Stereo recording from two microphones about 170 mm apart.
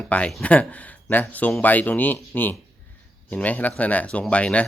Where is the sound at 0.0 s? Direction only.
5° left (ahead or behind).